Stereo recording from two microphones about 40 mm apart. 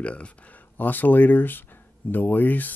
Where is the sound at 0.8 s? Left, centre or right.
Left.